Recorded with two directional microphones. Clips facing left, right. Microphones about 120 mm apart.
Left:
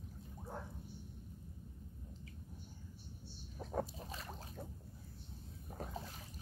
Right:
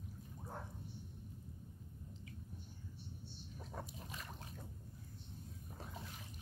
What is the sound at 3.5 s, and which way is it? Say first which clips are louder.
Pig: left 9 dB; 35° left (ahead or behind).